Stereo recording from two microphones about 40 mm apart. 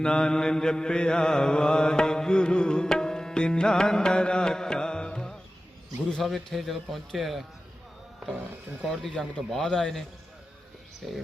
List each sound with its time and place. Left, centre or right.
0.0 s mantra: centre
6.2 s a man's voice: centre
9.1 s mantra: centre
11.0 s a man's voice: centre